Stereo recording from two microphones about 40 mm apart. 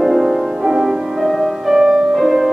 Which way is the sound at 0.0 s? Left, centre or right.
Centre.